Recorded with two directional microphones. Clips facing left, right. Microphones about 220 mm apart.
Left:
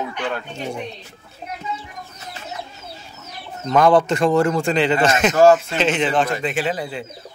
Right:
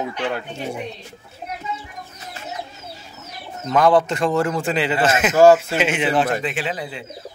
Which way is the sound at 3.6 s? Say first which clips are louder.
Left 1 dB; centre (ahead or behind).